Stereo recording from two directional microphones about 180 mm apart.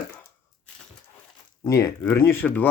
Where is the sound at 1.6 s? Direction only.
15° left (ahead or behind).